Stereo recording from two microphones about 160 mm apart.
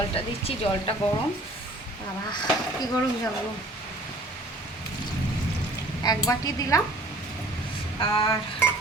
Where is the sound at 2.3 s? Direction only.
25° left (ahead or behind).